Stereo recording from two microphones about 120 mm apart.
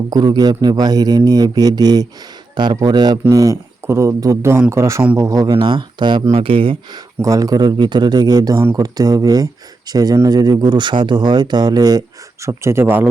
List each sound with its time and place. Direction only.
0.1 s a man's voice: 35° right (ahead or behind)
7.2 s speech: 30° right (ahead or behind)